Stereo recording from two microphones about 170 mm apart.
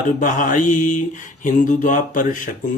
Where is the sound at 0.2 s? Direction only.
50° left (ahead or behind).